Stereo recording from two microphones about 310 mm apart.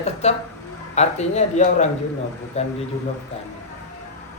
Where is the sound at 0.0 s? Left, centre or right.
Left.